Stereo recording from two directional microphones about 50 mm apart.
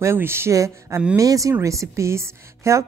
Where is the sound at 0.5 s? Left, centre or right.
Right.